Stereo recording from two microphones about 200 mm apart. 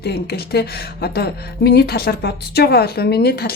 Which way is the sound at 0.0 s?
50° left (ahead or behind).